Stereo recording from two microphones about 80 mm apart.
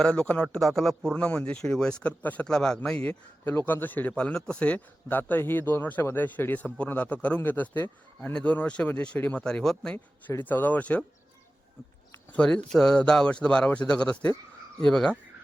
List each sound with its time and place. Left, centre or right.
0.0 s speech: centre
0.6 s a man's voice: centre
1.1 s speech: centre
2.5 s a man's voice: centre
4.1 s a man's voice: centre
10.2 s a man's voice: left
12.3 s speech: centre